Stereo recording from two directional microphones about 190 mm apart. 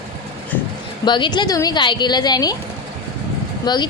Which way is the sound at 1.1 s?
25° left (ahead or behind).